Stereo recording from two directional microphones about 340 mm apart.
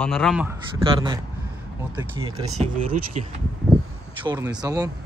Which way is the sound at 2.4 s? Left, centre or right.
Right.